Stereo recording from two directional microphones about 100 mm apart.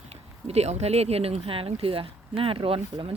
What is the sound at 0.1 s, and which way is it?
Speech, 90° right.